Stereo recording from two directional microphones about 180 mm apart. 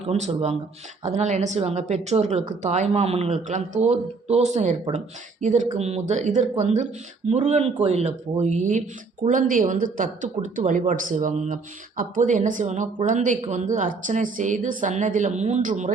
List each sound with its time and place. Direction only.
0.1 s speech: 35° right (ahead or behind)